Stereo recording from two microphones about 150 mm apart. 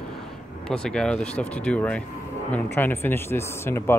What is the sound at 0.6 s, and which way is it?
Speech, 5° left (ahead or behind).